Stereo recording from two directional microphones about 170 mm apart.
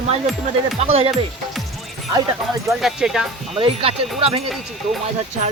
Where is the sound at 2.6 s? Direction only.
Centre (ahead or behind).